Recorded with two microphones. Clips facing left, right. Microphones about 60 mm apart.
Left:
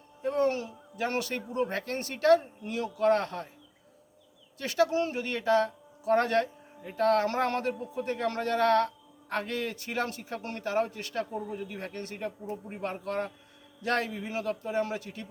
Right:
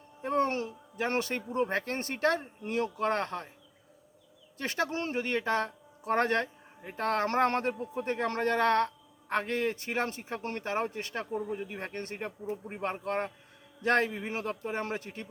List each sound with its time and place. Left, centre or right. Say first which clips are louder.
0.2 s speech: left 1 dB; right
4.5 s speech: left 6 dB; right